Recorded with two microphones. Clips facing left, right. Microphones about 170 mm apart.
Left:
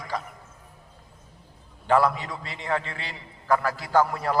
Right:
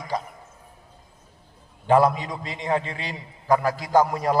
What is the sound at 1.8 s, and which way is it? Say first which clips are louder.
A man's voice: right 3 dB; 15° right (ahead or behind).